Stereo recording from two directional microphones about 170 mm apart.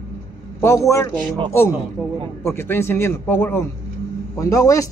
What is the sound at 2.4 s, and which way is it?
A man's voice, 15° left (ahead or behind).